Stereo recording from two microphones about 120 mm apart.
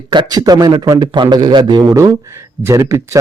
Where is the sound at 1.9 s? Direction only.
25° right (ahead or behind).